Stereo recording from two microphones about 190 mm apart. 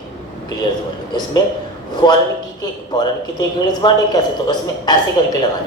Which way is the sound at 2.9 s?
20° left (ahead or behind).